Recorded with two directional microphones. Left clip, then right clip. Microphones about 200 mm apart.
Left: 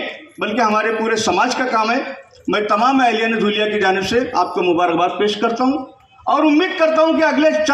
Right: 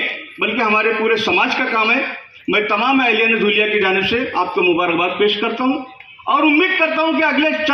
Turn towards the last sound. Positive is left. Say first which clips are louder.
# left 2 dB
turn(degrees=55)  # may be behind; listen again after turning